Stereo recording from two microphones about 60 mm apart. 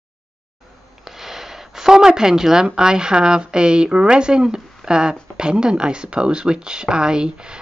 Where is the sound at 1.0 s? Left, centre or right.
Centre.